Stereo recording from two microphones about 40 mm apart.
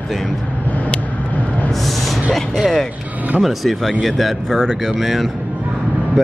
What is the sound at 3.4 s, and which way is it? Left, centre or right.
Speech, centre.